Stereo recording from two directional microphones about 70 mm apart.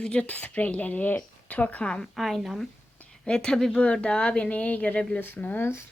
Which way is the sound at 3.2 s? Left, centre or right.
Centre.